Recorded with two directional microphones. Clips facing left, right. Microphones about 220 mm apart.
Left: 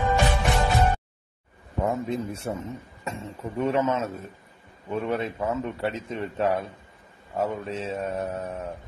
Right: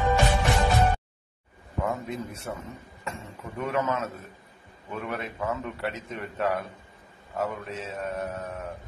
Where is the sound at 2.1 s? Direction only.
25° left (ahead or behind).